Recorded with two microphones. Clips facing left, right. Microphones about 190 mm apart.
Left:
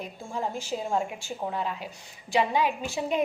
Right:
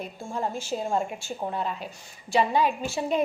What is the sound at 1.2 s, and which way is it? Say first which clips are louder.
A woman's voice: right 1 dB; 15° left (ahead or behind).